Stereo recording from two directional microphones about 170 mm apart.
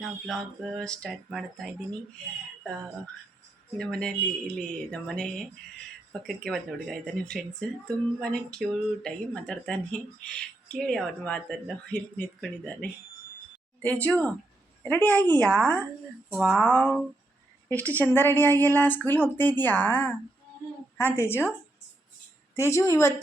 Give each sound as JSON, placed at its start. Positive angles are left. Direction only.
{"t": 0.0, "sound": "speech", "side_deg": 0}
{"t": 3.8, "sound": "speech", "side_deg": 5}
{"t": 16.3, "sound": "speech", "side_deg": -5}
{"t": 17.7, "sound": "speech", "side_deg": 10}
{"t": 22.5, "sound": "speech", "side_deg": 15}